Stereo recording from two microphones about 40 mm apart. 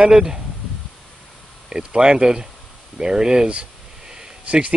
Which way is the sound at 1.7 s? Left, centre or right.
Right.